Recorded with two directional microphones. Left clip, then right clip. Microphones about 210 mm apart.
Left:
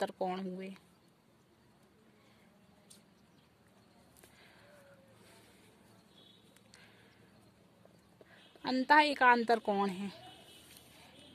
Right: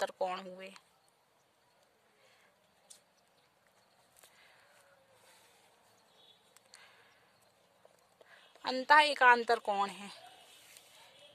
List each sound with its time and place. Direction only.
0.0 s speech: 20° right (ahead or behind)
6.7 s a sound: 15° right (ahead or behind)
8.3 s a woman's voice: 15° right (ahead or behind)